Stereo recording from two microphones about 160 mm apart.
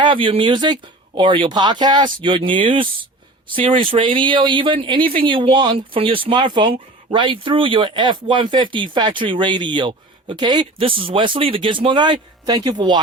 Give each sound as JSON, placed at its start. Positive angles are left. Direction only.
{"t": 0.0, "sound": "speech", "side_deg": -30}